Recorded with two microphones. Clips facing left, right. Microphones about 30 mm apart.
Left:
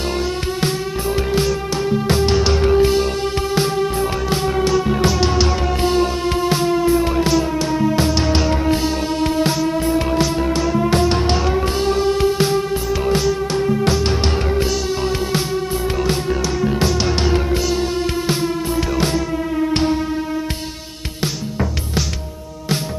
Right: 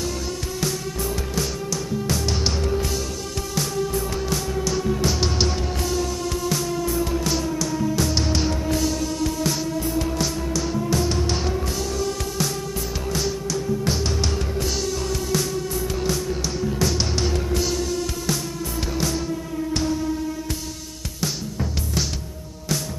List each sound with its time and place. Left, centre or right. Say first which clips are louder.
0.6 s music: left 5 dB; left
5.2 s music: left 6 dB; centre
5.8 s music: left 8 dB; left
13.5 s music: left 7 dB; left
14.0 s music: left 6 dB; left
16.8 s music: left 5 dB; left
19.5 s music: left 7 dB; left